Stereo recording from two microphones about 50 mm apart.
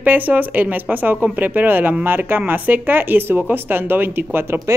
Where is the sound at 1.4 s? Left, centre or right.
Right.